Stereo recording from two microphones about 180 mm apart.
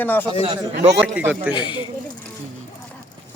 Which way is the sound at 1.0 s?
10° right (ahead or behind).